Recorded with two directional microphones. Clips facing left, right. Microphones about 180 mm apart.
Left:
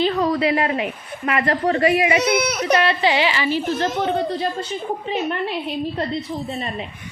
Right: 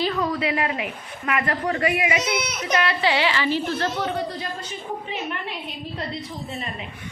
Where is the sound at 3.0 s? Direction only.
15° left (ahead or behind).